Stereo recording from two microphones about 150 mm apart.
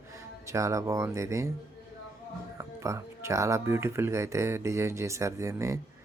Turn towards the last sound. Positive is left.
turn(degrees=-20)  # may be behind; listen again after turning